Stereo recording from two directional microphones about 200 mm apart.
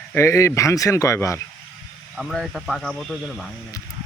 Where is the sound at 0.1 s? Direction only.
15° left (ahead or behind).